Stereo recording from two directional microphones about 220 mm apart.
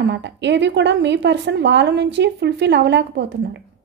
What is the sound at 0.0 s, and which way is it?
A woman's voice, 50° right (ahead or behind).